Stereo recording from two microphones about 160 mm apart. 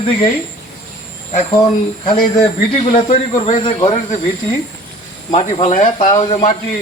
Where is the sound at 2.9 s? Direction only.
45° left (ahead or behind).